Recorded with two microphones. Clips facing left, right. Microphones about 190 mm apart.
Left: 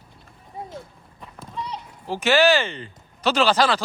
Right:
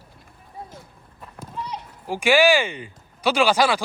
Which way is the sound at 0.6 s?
20° left (ahead or behind).